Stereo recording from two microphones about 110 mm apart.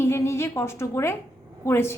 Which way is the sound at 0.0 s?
25° left (ahead or behind).